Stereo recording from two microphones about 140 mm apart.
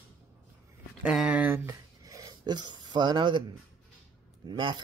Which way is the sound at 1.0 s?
5° right (ahead or behind).